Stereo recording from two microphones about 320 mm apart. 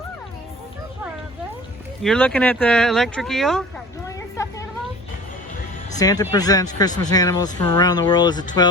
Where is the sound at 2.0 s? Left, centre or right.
Centre.